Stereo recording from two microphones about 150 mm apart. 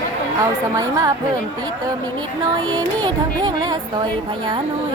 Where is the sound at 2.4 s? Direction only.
25° right (ahead or behind).